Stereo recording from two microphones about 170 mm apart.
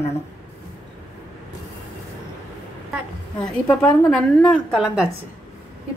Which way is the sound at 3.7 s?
5° left (ahead or behind).